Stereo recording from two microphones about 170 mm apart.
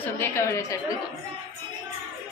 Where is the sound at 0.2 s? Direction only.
15° left (ahead or behind).